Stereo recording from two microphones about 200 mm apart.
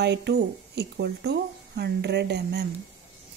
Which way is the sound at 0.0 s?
60° right (ahead or behind).